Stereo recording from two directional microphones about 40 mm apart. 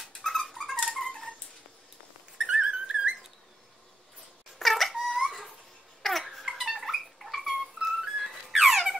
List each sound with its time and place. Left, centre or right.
0.0 s dog: centre
2.4 s whistling: right
4.6 s dog: centre
6.0 s a sound: centre